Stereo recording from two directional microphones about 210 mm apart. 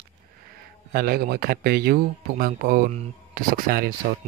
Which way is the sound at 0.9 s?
45° right (ahead or behind).